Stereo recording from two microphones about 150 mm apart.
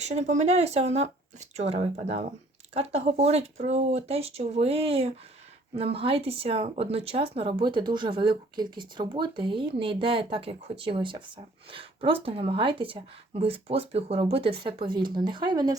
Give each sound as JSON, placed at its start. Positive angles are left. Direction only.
{"t": 0.0, "sound": "speech", "side_deg": -50}